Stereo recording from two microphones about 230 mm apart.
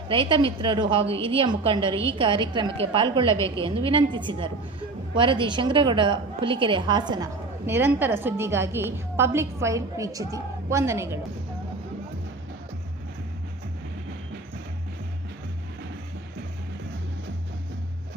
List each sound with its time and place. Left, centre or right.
0.1 s a woman's voice: right